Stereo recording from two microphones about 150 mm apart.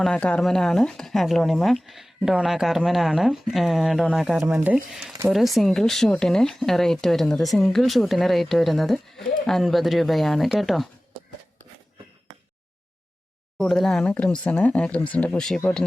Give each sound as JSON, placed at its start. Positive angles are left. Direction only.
{"t": 0.0, "sound": "speech", "side_deg": 5}
{"t": 13.6, "sound": "speech", "side_deg": 5}